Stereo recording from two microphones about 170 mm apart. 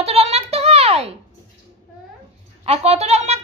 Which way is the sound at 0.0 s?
35° right (ahead or behind).